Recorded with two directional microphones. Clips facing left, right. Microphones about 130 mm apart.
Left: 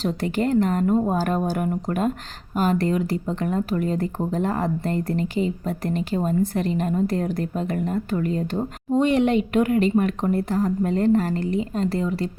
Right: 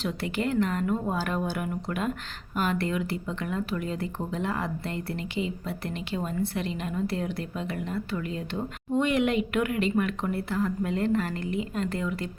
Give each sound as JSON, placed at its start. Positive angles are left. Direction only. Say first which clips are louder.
{"t": 0.0, "sound": "speech", "louder": "left 6 dB", "side_deg": 40}